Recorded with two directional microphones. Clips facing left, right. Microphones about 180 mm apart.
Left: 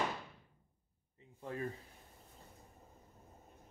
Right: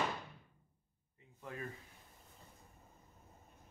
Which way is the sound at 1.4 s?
30° left (ahead or behind).